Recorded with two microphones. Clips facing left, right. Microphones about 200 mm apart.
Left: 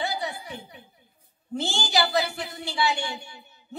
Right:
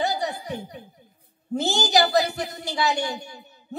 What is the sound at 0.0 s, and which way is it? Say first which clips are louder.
Chuckle: right 4 dB; 40° right (ahead or behind).